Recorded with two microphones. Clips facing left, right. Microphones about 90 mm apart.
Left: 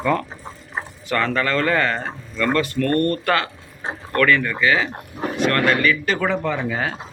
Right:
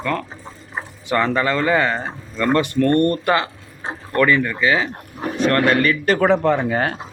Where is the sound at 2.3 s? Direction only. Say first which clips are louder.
Right 3 dB; 20° right (ahead or behind).